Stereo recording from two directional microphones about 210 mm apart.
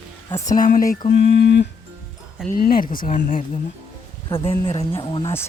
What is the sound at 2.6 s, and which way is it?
Speech, 45° left (ahead or behind).